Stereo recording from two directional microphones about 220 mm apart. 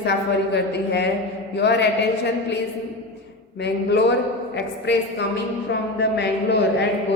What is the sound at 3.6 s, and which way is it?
A woman's voice, 50° left (ahead or behind).